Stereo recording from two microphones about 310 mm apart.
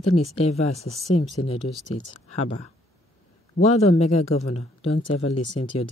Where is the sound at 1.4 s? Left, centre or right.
Left.